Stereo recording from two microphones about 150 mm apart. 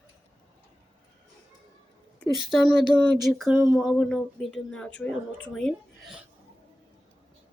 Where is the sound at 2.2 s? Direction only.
Centre (ahead or behind).